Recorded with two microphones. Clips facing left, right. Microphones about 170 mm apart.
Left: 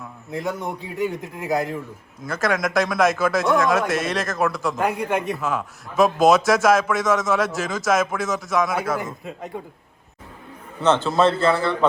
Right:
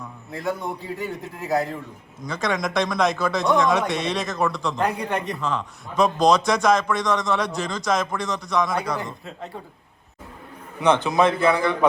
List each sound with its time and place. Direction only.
1.4 s speech: 15° left (ahead or behind)
2.2 s speech: 5° left (ahead or behind)
10.8 s a man's voice: 15° right (ahead or behind)